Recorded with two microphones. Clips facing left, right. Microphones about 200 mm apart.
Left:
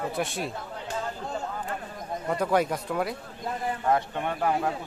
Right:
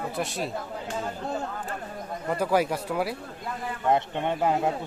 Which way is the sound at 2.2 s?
5° right (ahead or behind).